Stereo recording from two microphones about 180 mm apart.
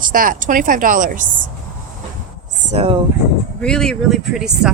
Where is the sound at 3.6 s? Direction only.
5° left (ahead or behind).